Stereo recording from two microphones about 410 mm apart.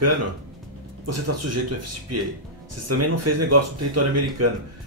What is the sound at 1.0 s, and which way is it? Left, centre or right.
Speech, right.